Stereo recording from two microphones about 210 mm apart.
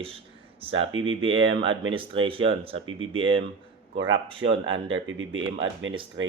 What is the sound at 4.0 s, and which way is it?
Speech, 65° right (ahead or behind).